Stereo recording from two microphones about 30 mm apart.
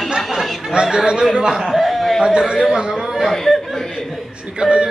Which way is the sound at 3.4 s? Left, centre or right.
Centre.